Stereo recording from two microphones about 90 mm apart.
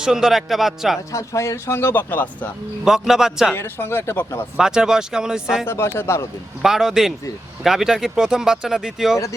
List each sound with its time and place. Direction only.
0.0 s speech: 5° right (ahead or behind)
1.1 s speech: 35° left (ahead or behind); by 2.5 s 20° left (ahead or behind)
2.8 s speech: 5° right (ahead or behind)
3.5 s speech: 25° left (ahead or behind)
4.5 s speech: 5° right (ahead or behind)
5.6 s speech: 30° left (ahead or behind)
6.6 s speech: 5° right (ahead or behind)